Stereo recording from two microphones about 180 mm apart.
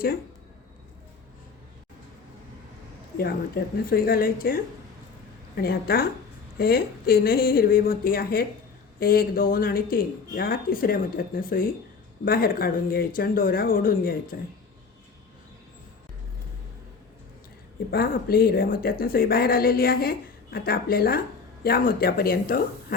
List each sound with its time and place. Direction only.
3.2 s a woman's voice: 55° left (ahead or behind)
17.9 s a woman's voice: 55° left (ahead or behind)